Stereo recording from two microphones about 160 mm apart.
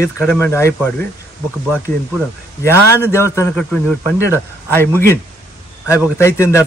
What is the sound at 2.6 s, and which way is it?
Speech, 15° left (ahead or behind).